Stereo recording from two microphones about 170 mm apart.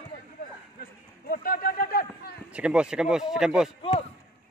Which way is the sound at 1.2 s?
60° left (ahead or behind).